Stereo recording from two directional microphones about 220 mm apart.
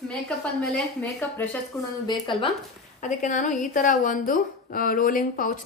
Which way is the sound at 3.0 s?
35° left (ahead or behind).